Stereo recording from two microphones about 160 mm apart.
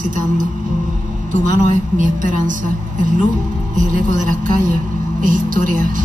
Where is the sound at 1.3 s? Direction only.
55° right (ahead or behind).